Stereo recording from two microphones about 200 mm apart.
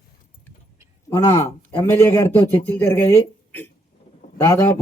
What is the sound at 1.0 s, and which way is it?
Speech, 15° left (ahead or behind).